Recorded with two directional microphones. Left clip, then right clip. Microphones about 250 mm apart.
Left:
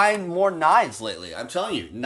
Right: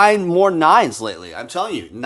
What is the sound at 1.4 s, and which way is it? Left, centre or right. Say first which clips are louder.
Speech: right 4 dB; centre.